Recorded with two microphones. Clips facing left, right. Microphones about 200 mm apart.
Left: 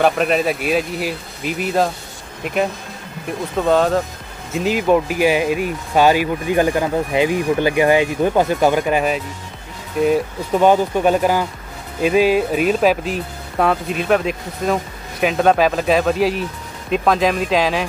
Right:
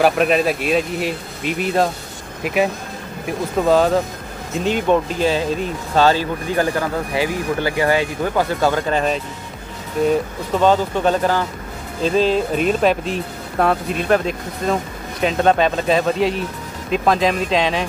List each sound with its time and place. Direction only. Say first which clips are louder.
0.0 s speech: right 1 dB; centre (ahead or behind)